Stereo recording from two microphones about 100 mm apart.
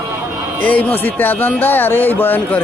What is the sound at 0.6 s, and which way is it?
Speech, 15° left (ahead or behind).